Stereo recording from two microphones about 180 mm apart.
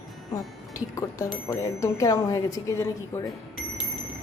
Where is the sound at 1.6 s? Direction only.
15° left (ahead or behind).